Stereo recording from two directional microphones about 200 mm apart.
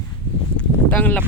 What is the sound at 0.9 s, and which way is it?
Speech, 10° left (ahead or behind).